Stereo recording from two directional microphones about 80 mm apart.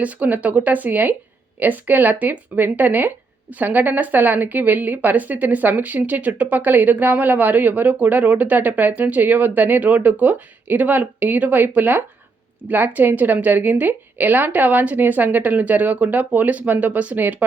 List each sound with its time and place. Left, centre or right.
0.0 s a woman's voice: centre